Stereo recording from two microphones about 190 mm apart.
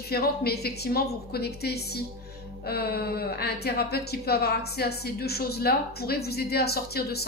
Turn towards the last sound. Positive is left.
turn(degrees=55)  # may be behind; listen again after turning